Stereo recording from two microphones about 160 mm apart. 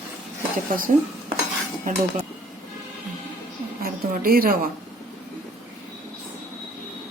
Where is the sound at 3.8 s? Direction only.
65° right (ahead or behind).